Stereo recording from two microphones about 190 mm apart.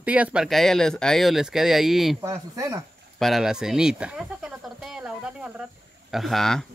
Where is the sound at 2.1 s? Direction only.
15° right (ahead or behind).